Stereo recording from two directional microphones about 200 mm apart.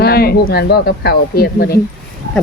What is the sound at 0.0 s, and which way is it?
Speech, 50° left (ahead or behind).